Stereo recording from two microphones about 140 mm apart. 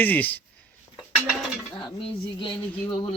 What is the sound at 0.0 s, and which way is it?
Speech, 10° left (ahead or behind).